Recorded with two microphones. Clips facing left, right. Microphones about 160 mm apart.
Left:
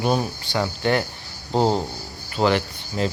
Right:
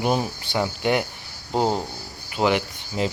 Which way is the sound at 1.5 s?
5° right (ahead or behind).